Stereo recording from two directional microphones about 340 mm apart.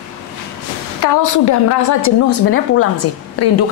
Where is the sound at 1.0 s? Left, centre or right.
Left.